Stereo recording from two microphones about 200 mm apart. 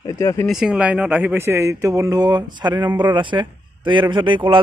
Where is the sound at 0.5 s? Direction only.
5° right (ahead or behind).